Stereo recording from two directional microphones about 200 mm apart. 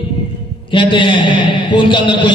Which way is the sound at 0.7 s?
25° left (ahead or behind).